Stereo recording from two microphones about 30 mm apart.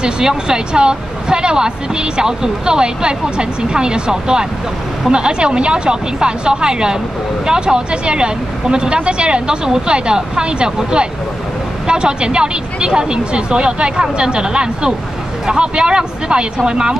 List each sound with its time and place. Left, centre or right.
0.0 s speech: right
11.9 s speech: right